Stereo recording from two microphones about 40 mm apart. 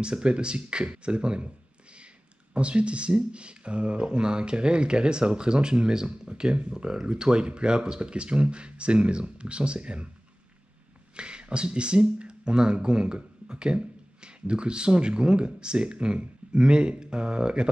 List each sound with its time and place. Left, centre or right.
0.0 s speech: right
11.1 s speech: right